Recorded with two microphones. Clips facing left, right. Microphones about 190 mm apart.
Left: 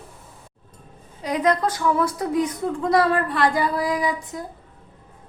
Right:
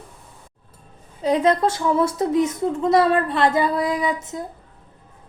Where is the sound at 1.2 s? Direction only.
25° right (ahead or behind).